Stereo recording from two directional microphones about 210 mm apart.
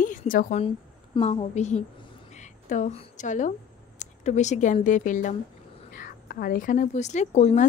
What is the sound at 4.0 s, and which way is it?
A woman's voice, 35° left (ahead or behind).